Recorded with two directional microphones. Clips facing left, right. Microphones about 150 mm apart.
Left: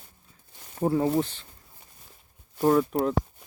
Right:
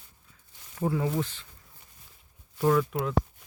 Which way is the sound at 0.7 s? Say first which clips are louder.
Left 5 dB; 30° left (ahead or behind).